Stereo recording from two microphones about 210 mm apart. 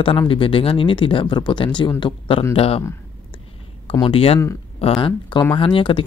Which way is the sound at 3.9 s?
25° left (ahead or behind).